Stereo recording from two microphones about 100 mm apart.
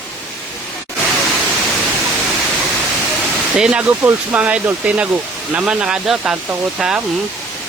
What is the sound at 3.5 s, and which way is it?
Speech, 10° right (ahead or behind).